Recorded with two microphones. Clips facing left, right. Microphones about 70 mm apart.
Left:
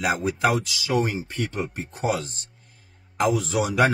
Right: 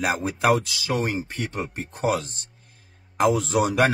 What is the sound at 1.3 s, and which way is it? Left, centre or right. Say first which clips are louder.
Speech: left 1 dB; right.